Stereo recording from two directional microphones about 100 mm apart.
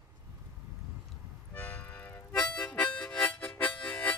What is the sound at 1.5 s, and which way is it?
Music, 15° left (ahead or behind).